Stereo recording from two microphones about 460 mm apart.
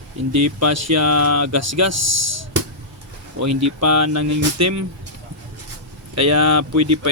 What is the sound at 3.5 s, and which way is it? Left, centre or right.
Speech, right.